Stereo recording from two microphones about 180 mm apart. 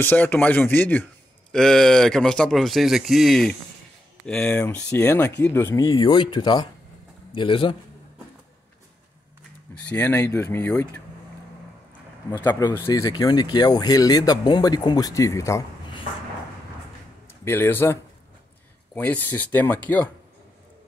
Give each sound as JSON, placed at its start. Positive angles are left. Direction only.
{"t": 0.0, "sound": "speech", "side_deg": 10}
{"t": 9.8, "sound": "speech", "side_deg": 10}
{"t": 12.3, "sound": "speech", "side_deg": 15}
{"t": 17.3, "sound": "speech", "side_deg": 10}
{"t": 18.9, "sound": "speech", "side_deg": 10}